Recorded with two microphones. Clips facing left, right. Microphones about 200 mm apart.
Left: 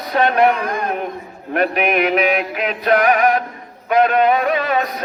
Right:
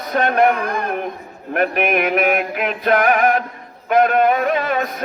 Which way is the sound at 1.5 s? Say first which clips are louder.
Left 1 dB; 50° right (ahead or behind).